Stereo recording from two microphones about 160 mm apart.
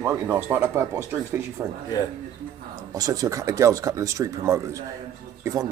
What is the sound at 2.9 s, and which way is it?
Speech, 20° right (ahead or behind).